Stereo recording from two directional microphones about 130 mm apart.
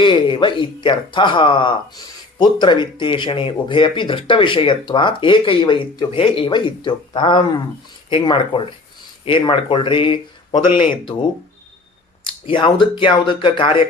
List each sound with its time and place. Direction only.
0.0 s speech: 40° left (ahead or behind)
12.2 s speech: 40° left (ahead or behind)